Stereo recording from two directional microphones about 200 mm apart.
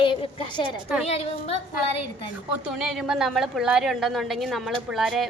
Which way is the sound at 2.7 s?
5° right (ahead or behind).